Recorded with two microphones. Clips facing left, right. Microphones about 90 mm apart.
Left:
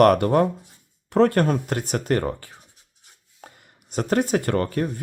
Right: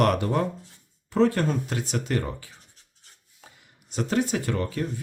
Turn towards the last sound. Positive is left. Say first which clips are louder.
# left 5 dB
turn(degrees=55)  # may be behind; listen again after turning